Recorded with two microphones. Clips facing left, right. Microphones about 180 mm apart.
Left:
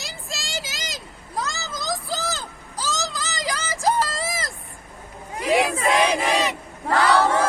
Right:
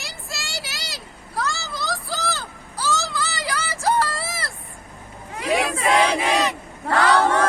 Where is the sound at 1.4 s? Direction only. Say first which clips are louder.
Right 2 dB; 20° left (ahead or behind).